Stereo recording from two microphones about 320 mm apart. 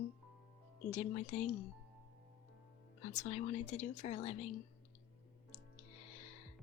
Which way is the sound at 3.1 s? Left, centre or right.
Left.